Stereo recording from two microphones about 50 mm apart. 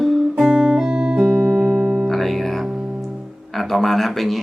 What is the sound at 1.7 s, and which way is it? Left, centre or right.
Music, right.